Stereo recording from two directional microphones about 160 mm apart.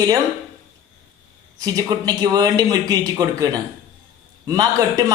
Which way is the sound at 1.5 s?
25° right (ahead or behind).